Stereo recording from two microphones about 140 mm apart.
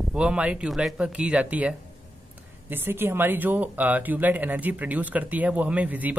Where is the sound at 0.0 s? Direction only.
5° right (ahead or behind).